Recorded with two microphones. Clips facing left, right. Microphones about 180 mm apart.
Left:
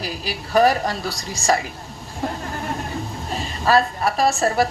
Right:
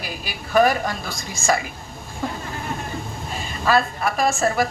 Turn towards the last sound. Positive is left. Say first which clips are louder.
# left 2 dB
turn(degrees=35)  # may be behind; listen again after turning